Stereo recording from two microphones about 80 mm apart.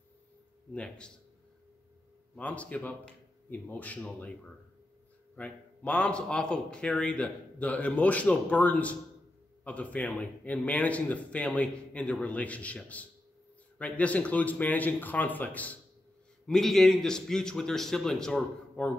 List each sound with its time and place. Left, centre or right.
0.7 s a man's voice: centre
2.3 s a man's voice: centre
5.3 s a man's voice: centre
16.4 s a man's voice: centre